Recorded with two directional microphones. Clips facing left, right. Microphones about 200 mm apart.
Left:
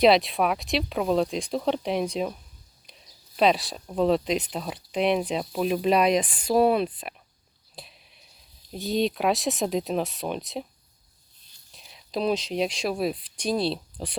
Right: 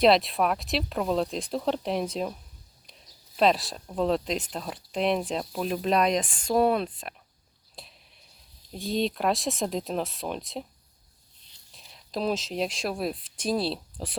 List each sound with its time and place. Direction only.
0.0 s speech: centre (ahead or behind)
3.3 s speech: centre (ahead or behind)
7.8 s a sound: centre (ahead or behind)
8.7 s speech: centre (ahead or behind)
11.7 s speech: centre (ahead or behind)